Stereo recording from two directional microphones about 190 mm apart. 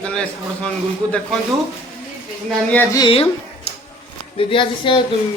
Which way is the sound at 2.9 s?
25° left (ahead or behind).